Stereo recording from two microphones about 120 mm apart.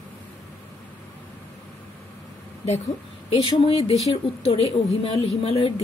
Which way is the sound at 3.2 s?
55° left (ahead or behind).